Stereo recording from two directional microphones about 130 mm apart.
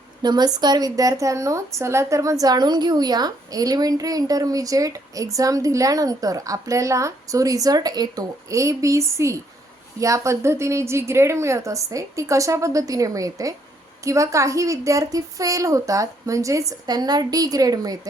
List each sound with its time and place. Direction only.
0.2 s a woman's voice: 30° right (ahead or behind)